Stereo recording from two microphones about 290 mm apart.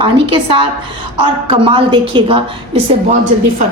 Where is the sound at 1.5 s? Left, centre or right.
Centre.